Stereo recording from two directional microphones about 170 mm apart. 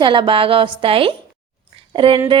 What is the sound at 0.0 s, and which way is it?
A woman's voice, 30° right (ahead or behind).